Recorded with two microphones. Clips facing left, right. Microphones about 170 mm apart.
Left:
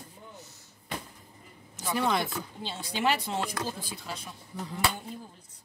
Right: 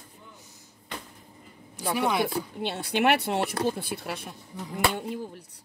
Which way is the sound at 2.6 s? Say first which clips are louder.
Right 5 dB; 65° right (ahead or behind).